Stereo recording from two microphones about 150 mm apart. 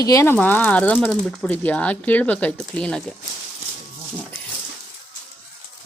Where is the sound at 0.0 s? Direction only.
20° left (ahead or behind).